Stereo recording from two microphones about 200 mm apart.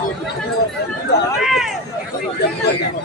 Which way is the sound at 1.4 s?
Centre (ahead or behind).